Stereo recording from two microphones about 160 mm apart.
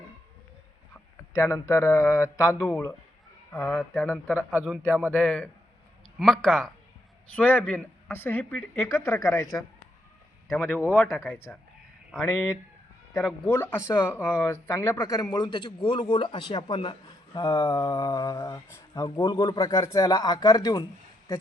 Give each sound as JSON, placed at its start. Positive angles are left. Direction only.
{"t": 1.3, "sound": "speech", "side_deg": 20}
{"t": 4.4, "sound": "speech", "side_deg": -5}
{"t": 5.1, "sound": "speech", "side_deg": 10}
{"t": 10.5, "sound": "speech", "side_deg": 5}
{"t": 11.1, "sound": "speech", "side_deg": 0}
{"t": 13.1, "sound": "speech", "side_deg": 10}